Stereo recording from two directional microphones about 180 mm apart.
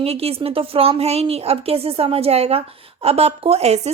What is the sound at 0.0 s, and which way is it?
A woman's voice, 35° right (ahead or behind).